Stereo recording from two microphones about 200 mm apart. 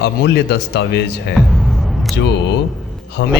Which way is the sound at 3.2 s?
65° left (ahead or behind).